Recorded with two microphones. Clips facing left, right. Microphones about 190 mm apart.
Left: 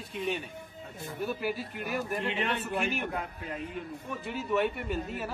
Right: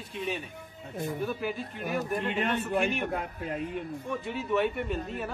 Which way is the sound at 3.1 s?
45° right (ahead or behind).